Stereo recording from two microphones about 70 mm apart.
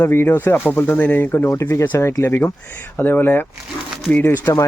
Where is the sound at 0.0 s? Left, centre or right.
Left.